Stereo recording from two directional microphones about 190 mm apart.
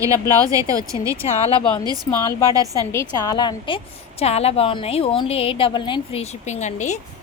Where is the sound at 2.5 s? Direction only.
20° right (ahead or behind).